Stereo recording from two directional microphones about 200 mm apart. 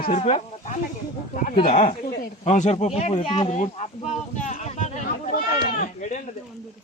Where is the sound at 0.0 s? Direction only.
40° left (ahead or behind).